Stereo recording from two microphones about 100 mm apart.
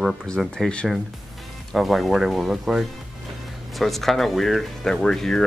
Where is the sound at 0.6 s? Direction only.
5° left (ahead or behind).